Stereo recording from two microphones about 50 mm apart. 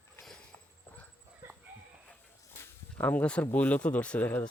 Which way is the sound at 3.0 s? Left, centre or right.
Left.